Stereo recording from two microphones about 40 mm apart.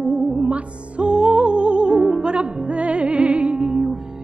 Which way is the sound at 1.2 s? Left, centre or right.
Centre.